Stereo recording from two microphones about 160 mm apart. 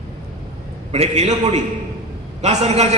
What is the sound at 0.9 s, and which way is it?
A man's voice, 40° right (ahead or behind).